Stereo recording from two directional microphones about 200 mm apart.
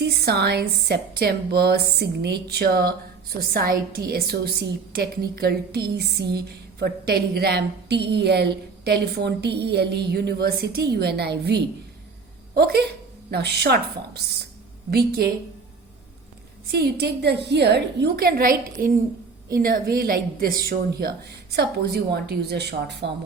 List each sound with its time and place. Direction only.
0.0 s a woman's voice: 55° right (ahead or behind)
16.7 s a woman's voice: 55° right (ahead or behind)